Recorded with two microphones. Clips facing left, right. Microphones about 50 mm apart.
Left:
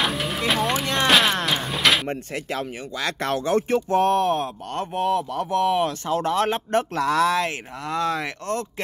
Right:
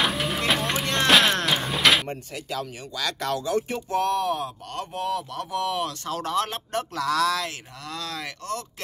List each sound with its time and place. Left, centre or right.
0.0 s vehicle: centre
2.0 s speech: left